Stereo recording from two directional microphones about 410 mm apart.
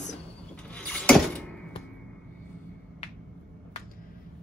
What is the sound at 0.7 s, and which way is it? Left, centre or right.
Mechanisms, centre.